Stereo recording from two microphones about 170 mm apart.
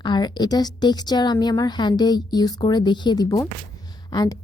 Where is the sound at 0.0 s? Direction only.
25° left (ahead or behind).